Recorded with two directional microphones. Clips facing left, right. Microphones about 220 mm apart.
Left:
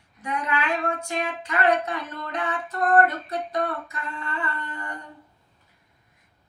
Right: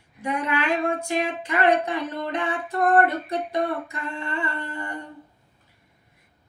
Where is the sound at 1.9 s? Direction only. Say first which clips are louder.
Right 5 dB; 25° right (ahead or behind).